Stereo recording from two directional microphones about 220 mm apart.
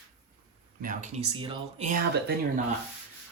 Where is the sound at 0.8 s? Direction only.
35° right (ahead or behind).